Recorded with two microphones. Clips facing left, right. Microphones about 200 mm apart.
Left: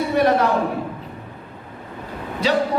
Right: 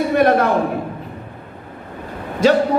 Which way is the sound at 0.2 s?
55° right (ahead or behind).